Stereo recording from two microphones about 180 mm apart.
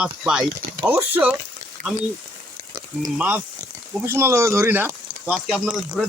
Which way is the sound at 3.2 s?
10° right (ahead or behind).